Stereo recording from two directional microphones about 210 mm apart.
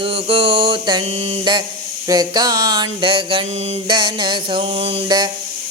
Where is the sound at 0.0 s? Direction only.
25° right (ahead or behind).